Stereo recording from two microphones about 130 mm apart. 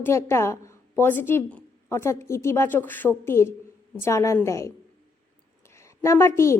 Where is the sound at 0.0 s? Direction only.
20° left (ahead or behind).